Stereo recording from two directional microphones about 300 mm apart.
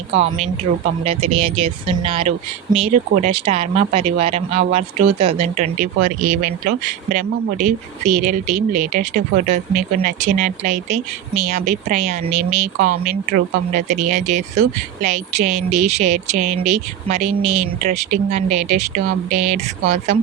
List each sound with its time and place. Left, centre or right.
1.0 s speech: centre
6.1 s speech: right
6.4 s speech: right
12.3 s speech: right
12.8 s speech: right